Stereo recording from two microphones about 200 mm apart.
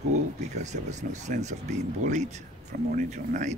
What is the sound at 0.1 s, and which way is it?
Speech, 35° right (ahead or behind).